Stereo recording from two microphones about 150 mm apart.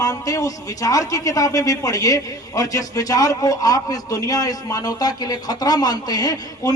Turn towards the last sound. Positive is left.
turn(degrees=25)  # may be behind; listen again after turning